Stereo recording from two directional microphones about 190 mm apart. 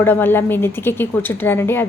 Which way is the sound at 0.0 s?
10° left (ahead or behind).